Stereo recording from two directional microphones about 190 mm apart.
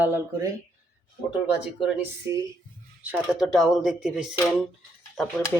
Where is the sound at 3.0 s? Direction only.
5° right (ahead or behind).